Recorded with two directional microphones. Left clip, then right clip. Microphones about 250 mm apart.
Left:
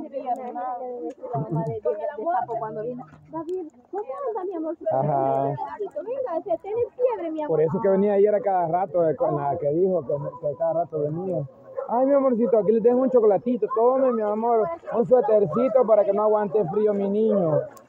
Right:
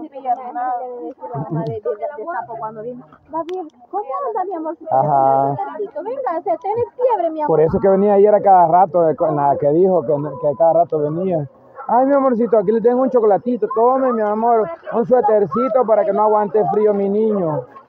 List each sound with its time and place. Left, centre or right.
4.4 s speech: right
11.9 s speech: right